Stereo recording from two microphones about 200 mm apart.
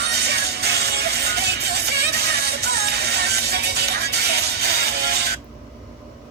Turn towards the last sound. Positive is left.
turn(degrees=-55)  # may be behind; listen again after turning